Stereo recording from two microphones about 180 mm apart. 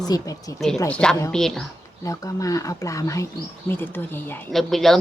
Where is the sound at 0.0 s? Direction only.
20° left (ahead or behind).